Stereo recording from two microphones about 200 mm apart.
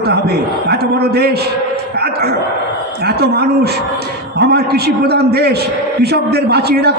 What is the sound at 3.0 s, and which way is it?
A man's voice, 55° right (ahead or behind).